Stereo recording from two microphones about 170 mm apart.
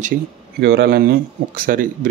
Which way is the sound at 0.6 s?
75° right (ahead or behind).